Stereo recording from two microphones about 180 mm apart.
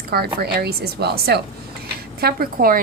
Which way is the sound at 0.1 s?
60° right (ahead or behind).